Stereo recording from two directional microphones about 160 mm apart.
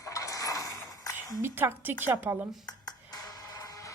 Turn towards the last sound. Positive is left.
turn(degrees=20)  # may be behind; listen again after turning